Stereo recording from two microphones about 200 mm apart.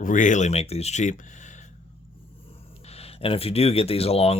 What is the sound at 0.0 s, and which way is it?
Speech, 40° left (ahead or behind).